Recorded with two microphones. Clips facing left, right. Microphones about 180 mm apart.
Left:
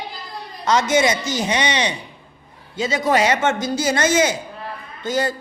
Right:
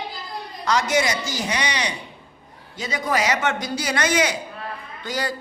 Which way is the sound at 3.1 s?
30° left (ahead or behind).